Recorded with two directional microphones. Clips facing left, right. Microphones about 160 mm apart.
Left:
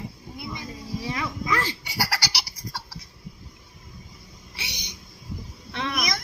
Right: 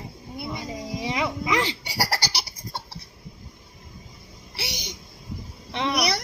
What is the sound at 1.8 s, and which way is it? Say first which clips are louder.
Laughter: right 2 dB; 30° right (ahead or behind).